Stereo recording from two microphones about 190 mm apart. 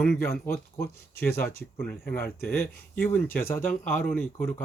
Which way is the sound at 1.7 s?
10° left (ahead or behind).